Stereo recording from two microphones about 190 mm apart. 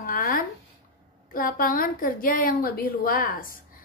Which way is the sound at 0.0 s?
45° left (ahead or behind).